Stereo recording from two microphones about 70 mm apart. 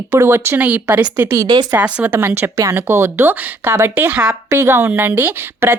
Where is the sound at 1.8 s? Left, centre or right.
Centre.